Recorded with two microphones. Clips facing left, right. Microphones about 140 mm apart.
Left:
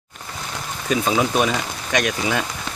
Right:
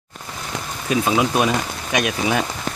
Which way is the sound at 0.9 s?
10° right (ahead or behind).